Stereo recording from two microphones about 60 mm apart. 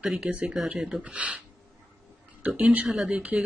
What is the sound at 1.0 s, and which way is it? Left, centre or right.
Speech, right.